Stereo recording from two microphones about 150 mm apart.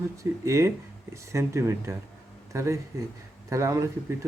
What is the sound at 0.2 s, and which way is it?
Speech, 20° right (ahead or behind).